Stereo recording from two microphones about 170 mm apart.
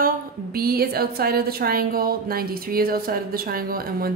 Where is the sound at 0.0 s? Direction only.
60° right (ahead or behind).